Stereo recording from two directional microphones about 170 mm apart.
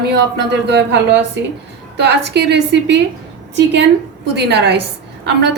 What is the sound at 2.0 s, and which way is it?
A woman's voice, 80° right.